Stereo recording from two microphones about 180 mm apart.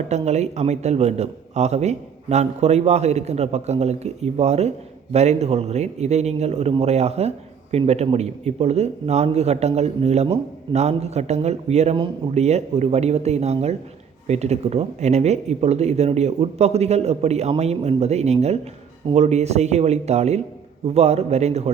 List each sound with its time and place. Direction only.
0.1 s a man's voice: 40° right (ahead or behind)